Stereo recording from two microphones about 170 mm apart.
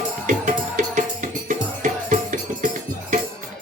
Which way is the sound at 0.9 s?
50° right (ahead or behind).